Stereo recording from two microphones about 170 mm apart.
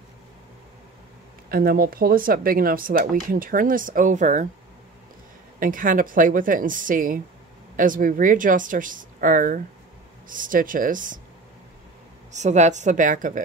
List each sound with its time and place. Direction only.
1.5 s speech: 60° right (ahead or behind)
5.6 s speech: 55° right (ahead or behind)
12.3 s speech: 45° right (ahead or behind)